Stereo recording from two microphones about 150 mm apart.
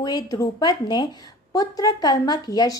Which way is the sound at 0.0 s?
25° left (ahead or behind).